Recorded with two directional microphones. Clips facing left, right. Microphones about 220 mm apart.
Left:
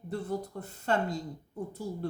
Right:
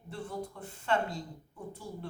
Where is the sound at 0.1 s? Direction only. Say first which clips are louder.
Left 5 dB; 40° left (ahead or behind).